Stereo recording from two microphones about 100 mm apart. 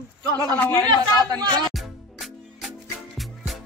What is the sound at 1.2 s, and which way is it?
Speech, 45° right (ahead or behind).